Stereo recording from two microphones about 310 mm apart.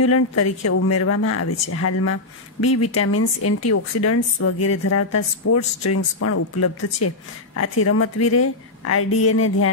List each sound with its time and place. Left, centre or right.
0.0 s speech: left